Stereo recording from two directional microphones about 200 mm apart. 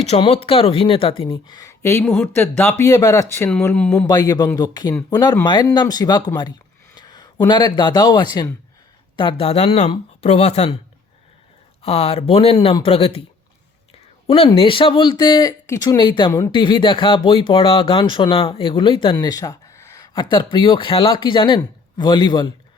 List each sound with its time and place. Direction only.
0.0 s speech: 30° left (ahead or behind); by 4.0 s 5° left (ahead or behind)
4.0 s speech: 20° left (ahead or behind)
11.8 s speech: 30° left (ahead or behind)
14.3 s speech: 30° left (ahead or behind)